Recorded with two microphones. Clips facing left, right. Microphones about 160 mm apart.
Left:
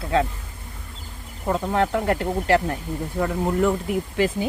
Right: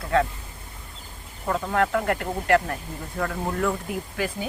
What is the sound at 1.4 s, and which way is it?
Speech, 20° left (ahead or behind).